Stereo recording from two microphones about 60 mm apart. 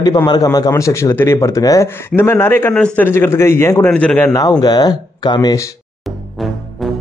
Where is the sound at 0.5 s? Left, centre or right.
Left.